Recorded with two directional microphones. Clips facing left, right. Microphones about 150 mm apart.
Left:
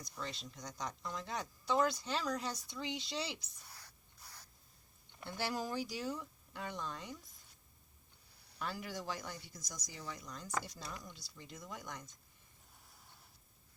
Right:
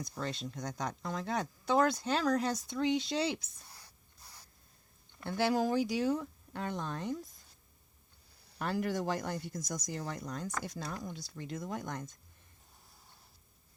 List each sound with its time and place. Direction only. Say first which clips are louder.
0.5 s speech: right 6 dB; 55° right (ahead or behind)
1.1 s speech: right 7 dB; 80° right
2.6 s speech: right 11 dB; 60° right (ahead or behind)
3.7 s whispering: left 1 dB; 25° right (ahead or behind)
5.2 s speech: right 9 dB; 65° right (ahead or behind)
8.5 s speech: right 9 dB; 60° right (ahead or behind); by 10.4 s 80° right
10.4 s speech: right 3 dB; 55° right (ahead or behind)
11.3 s speech: right 10 dB; 65° right (ahead or behind)